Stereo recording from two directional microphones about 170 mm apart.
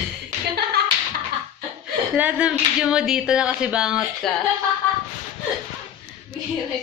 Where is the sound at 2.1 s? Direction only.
10° right (ahead or behind).